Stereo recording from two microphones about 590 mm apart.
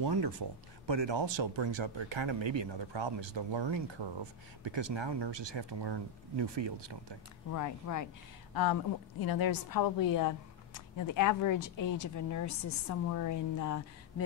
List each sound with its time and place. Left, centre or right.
0.0 s speech: right
7.5 s a woman's voice: left